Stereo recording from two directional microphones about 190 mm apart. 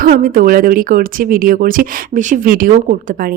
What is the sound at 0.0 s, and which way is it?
A woman's voice, 45° right (ahead or behind).